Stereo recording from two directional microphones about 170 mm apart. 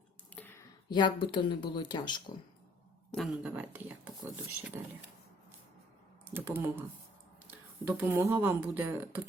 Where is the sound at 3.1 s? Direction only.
Centre (ahead or behind).